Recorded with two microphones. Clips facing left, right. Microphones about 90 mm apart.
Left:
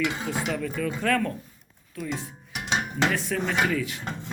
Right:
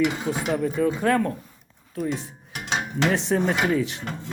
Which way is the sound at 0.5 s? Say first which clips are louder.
Right 6 dB; 25° right (ahead or behind).